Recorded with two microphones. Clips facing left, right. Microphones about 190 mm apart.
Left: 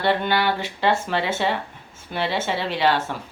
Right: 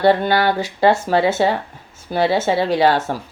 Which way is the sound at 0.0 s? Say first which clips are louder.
Right 6 dB; 40° right (ahead or behind).